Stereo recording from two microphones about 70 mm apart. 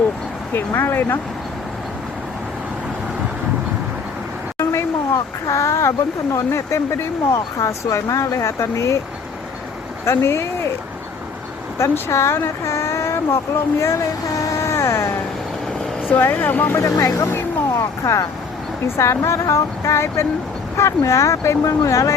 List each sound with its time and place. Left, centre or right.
0.5 s speech: left
4.5 s a sound: left
6.3 s speech: left
10.1 s speech: left
11.8 s speech: left
14.5 s a sound: left
16.1 s speech: left
16.7 s speech: left